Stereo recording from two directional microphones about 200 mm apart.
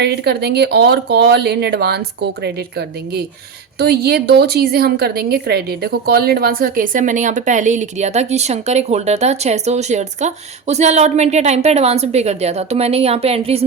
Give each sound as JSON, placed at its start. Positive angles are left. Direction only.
{"t": 0.0, "sound": "a woman's voice", "side_deg": -55}